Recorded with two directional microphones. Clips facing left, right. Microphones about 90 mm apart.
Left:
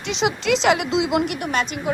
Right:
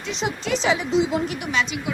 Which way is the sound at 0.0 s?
90° left.